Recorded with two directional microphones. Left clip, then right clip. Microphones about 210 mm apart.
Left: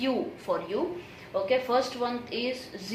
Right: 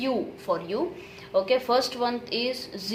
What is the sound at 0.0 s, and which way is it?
A woman's voice, 30° right (ahead or behind).